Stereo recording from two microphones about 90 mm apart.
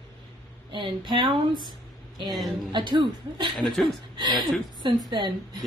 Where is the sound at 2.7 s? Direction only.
60° right (ahead or behind).